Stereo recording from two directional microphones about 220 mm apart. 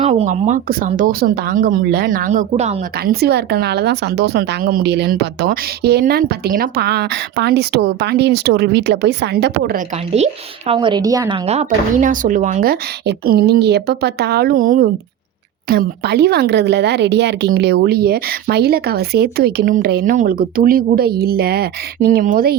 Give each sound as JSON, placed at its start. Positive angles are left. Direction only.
{"t": 0.0, "sound": "speech", "side_deg": -30}
{"t": 3.0, "sound": "a woman's voice", "side_deg": -45}
{"t": 10.7, "sound": "a woman's voice", "side_deg": -20}
{"t": 11.4, "sound": "a woman's voice", "side_deg": -30}